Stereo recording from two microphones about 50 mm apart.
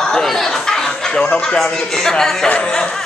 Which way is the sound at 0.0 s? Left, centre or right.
Centre.